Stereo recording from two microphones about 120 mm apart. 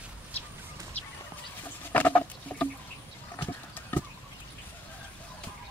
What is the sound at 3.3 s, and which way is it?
Horse, 15° left (ahead or behind).